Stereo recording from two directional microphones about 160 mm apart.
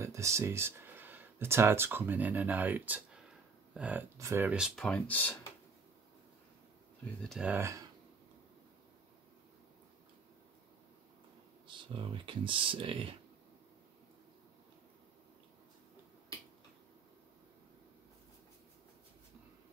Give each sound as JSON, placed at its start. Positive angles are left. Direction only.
{"t": 0.0, "sound": "speech", "side_deg": -20}
{"t": 7.2, "sound": "speech", "side_deg": 0}
{"t": 11.6, "sound": "speech", "side_deg": -30}